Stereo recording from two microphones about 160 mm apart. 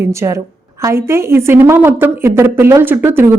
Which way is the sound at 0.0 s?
20° right (ahead or behind).